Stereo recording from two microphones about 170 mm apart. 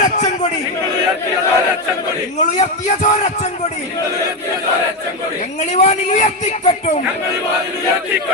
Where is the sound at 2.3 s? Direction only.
45° left (ahead or behind).